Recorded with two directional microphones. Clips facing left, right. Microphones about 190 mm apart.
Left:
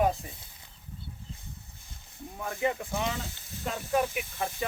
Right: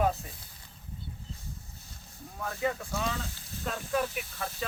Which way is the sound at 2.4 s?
15° left (ahead or behind).